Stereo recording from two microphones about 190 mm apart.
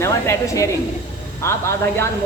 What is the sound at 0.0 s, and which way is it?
Speech, 15° left (ahead or behind).